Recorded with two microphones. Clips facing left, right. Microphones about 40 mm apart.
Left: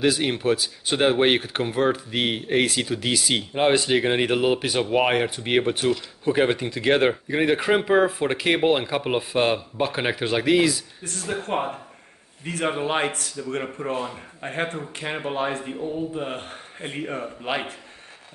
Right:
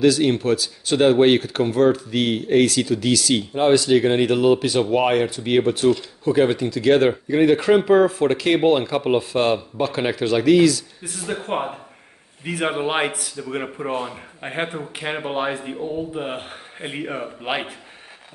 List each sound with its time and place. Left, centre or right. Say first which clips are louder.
0.0 s speech: right 5 dB; centre
11.1 s speech: right 1 dB; centre